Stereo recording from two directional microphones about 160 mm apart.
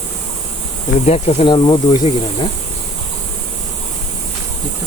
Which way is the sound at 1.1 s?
40° left (ahead or behind).